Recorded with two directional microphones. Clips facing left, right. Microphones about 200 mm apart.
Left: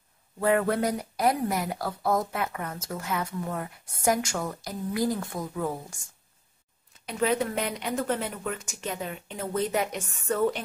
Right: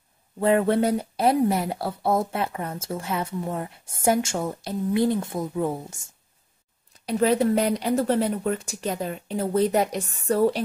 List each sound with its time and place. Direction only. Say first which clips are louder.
0.4 s speech: right 4 dB; 25° right (ahead or behind)
7.1 s speech: right 6 dB; 35° right (ahead or behind)